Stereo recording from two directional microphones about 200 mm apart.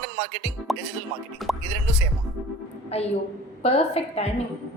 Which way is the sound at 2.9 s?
30° left (ahead or behind).